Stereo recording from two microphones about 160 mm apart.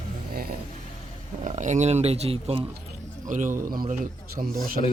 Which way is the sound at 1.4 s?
50° right (ahead or behind).